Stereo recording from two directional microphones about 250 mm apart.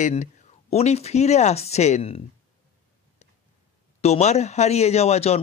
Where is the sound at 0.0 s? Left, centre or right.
Left.